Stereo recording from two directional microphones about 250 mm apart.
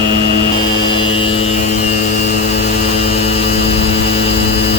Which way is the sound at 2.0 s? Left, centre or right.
Left.